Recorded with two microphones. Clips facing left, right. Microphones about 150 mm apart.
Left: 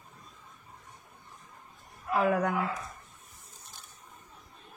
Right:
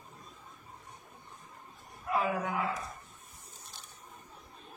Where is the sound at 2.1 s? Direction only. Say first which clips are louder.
Left 5 dB; 70° left (ahead or behind).